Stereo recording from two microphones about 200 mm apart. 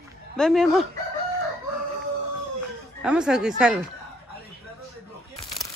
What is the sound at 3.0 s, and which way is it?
Speech, 5° right (ahead or behind).